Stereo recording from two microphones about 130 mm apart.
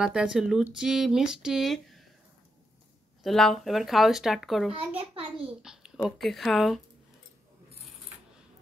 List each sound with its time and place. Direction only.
0.0 s speech: 5° right (ahead or behind)
3.3 s speech: centre (ahead or behind)
4.7 s a child's voice: 45° right (ahead or behind)
5.6 s babbling: 5° right (ahead or behind)
6.0 s speech: centre (ahead or behind)